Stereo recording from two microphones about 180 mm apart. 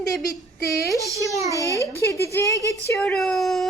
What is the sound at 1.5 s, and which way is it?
A woman's voice, 20° left (ahead or behind).